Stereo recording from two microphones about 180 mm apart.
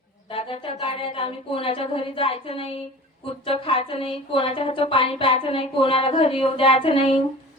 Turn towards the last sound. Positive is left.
turn(degrees=30)  # may be behind; listen again after turning